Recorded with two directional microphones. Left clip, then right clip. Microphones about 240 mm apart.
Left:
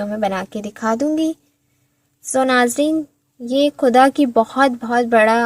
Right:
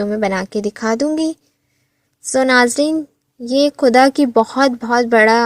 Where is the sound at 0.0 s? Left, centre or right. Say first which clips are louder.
Right 2 dB; right.